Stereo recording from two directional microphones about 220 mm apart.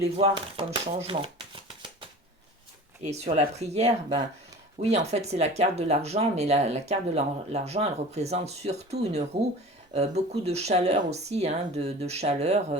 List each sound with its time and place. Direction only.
0.2 s speech: 25° right (ahead or behind)
1.0 s shuffling cards: 25° right (ahead or behind)
3.0 s speech: 30° right (ahead or behind)